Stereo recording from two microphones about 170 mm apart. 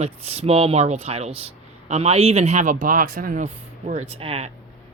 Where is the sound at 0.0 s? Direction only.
35° right (ahead or behind).